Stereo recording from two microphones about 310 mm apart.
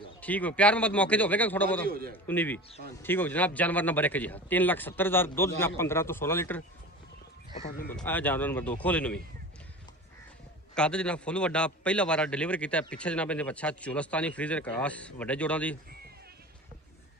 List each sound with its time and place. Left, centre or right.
0.2 s a man's voice: centre
1.9 s a man's voice: right
2.2 s a man's voice: centre
7.9 s a man's voice: centre
10.8 s a man's voice: centre